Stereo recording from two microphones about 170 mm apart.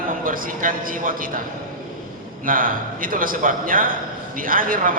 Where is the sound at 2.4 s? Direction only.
55° right (ahead or behind).